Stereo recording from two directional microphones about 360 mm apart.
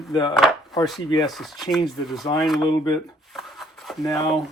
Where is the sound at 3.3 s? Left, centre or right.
Centre.